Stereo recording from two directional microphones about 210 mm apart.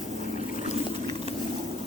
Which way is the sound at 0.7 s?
30° left (ahead or behind).